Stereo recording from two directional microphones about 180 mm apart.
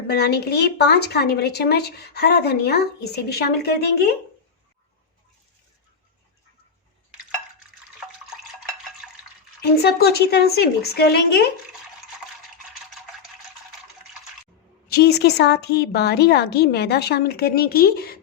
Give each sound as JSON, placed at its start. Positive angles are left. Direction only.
{"t": 0.1, "sound": "a woman's voice", "side_deg": 65}
{"t": 9.6, "sound": "a woman's voice", "side_deg": 60}
{"t": 14.8, "sound": "a woman's voice", "side_deg": 60}